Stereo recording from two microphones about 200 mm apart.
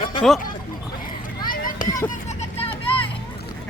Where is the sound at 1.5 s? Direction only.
45° left (ahead or behind).